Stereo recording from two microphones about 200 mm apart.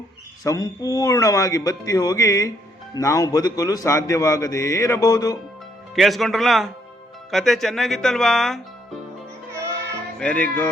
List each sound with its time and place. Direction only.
0.4 s a man's voice: 15° left (ahead or behind)
5.9 s speech: centre (ahead or behind)
10.2 s a man's voice: 5° left (ahead or behind)